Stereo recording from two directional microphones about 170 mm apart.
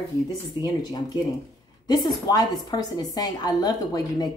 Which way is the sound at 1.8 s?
25° left (ahead or behind).